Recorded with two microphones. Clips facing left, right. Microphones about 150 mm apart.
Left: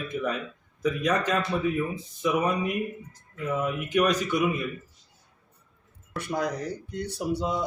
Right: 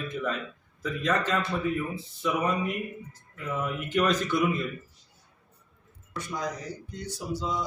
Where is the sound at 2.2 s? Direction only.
15° left (ahead or behind).